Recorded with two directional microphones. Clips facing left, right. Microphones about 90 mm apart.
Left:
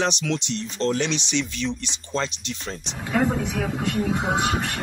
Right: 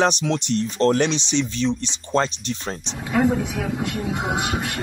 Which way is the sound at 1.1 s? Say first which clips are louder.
Right 3 dB; 30° right (ahead or behind).